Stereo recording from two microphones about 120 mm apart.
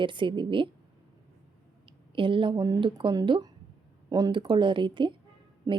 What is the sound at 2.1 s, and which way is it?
A woman's voice, 45° right (ahead or behind).